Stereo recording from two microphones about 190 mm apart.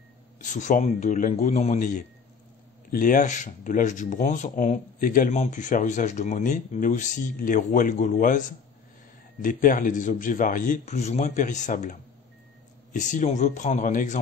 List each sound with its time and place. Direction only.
0.4 s speech: 40° left (ahead or behind)